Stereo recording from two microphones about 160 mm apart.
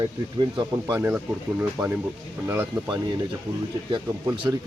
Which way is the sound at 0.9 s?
15° right (ahead or behind).